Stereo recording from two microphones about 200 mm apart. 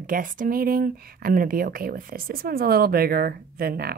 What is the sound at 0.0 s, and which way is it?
Speech, 45° right (ahead or behind).